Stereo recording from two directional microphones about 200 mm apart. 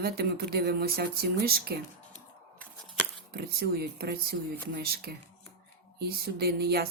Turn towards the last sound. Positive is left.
turn(degrees=-50)  # may be behind; listen again after turning